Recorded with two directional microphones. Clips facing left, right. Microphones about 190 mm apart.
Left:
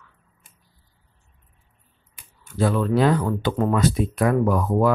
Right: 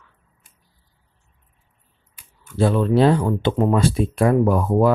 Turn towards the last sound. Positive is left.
turn(degrees=-30)  # may be behind; listen again after turning